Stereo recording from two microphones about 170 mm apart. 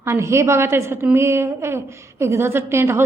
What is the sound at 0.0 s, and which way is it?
A woman's voice, 15° right (ahead or behind).